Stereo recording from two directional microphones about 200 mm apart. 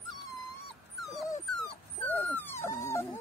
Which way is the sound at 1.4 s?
5° left (ahead or behind).